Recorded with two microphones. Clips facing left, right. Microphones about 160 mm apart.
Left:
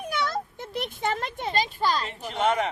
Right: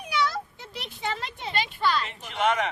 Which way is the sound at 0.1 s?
50° left (ahead or behind).